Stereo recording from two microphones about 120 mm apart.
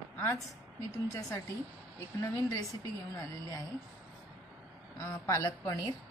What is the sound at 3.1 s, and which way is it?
Speech, 30° left (ahead or behind).